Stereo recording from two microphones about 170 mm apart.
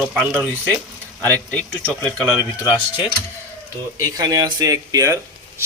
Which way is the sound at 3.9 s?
20° right (ahead or behind).